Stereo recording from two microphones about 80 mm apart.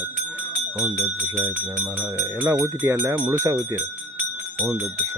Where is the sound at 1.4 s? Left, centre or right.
Centre.